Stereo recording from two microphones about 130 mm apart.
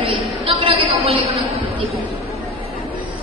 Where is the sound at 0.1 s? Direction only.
45° right (ahead or behind).